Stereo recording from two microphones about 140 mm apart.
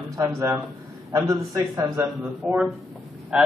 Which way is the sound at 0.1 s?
25° right (ahead or behind).